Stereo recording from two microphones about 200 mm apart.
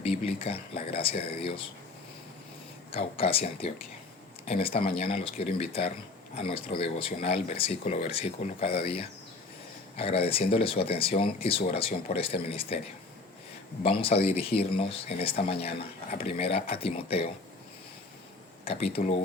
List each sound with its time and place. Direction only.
0.0 s speech: 30° left (ahead or behind)
2.9 s speech: 30° left (ahead or behind)
13.8 s speech: 30° left (ahead or behind)
18.6 s speech: 30° left (ahead or behind)